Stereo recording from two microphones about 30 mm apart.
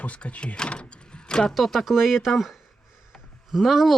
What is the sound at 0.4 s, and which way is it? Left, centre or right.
Speech, left.